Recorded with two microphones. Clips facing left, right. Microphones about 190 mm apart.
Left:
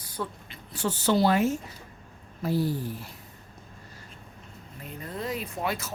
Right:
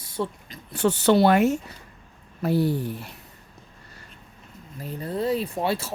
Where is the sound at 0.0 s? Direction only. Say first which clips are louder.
Right 6 dB; 25° right (ahead or behind).